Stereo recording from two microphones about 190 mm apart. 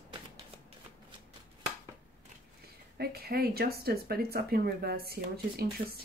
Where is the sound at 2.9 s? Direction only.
55° right (ahead or behind).